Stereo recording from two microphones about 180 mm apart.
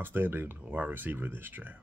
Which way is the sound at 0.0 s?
10° right (ahead or behind).